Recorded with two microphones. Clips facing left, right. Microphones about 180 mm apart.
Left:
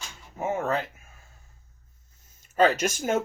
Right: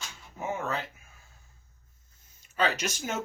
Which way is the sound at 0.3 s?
50° left (ahead or behind).